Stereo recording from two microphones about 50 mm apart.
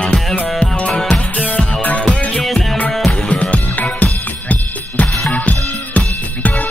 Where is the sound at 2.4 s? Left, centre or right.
Centre.